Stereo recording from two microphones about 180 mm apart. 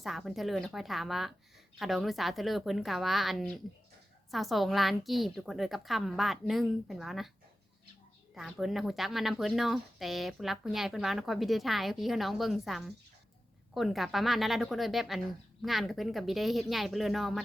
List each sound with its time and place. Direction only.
0.0 s speech: centre (ahead or behind)
8.4 s speech: centre (ahead or behind)